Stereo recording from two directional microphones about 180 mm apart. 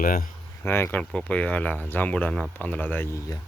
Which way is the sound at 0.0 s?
50° left (ahead or behind).